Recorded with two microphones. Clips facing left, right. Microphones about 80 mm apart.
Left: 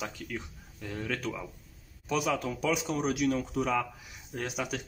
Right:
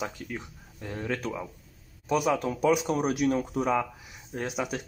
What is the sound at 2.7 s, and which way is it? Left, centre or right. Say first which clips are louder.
Speech: right 4 dB; right.